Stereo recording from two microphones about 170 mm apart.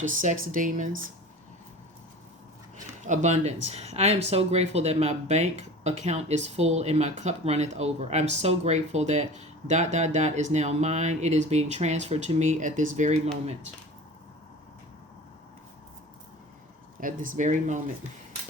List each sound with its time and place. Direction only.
0.0 s speech: 50° right (ahead or behind)
3.0 s speech: 45° right (ahead or behind)
17.0 s speech: 50° right (ahead or behind)